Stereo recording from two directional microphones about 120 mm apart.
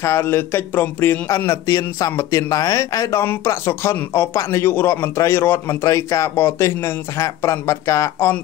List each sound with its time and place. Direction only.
0.0 s a man's voice: 20° left (ahead or behind)